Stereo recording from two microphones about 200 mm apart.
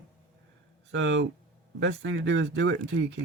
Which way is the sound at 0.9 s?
65° right (ahead or behind).